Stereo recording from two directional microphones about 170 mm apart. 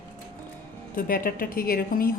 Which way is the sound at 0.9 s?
55° left (ahead or behind).